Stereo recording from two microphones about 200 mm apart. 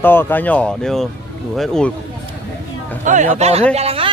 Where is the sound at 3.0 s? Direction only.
40° right (ahead or behind).